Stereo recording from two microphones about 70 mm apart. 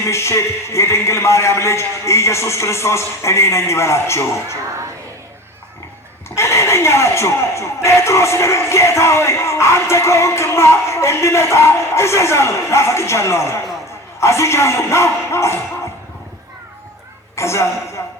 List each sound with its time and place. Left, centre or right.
0.1 s speech: left
6.3 s speech: left
17.3 s a woman's voice: left